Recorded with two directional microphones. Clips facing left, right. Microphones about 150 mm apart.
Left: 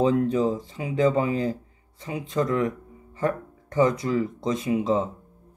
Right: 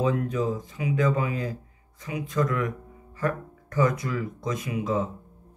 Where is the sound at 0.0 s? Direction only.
30° left (ahead or behind).